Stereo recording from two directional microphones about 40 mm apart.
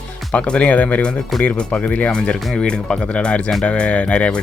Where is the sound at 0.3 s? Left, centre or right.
Left.